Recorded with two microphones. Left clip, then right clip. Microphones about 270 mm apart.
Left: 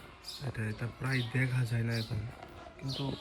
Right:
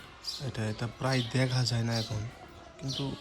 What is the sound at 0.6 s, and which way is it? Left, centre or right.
Speech, centre.